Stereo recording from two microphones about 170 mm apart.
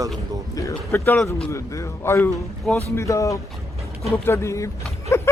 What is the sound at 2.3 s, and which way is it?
Speech, centre (ahead or behind).